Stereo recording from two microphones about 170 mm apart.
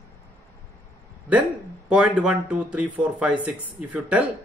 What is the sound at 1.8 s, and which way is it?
Speech, 5° right (ahead or behind).